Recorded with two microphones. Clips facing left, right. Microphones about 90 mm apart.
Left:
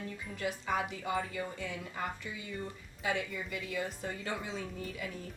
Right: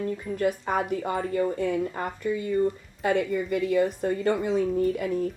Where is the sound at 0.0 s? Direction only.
50° right (ahead or behind).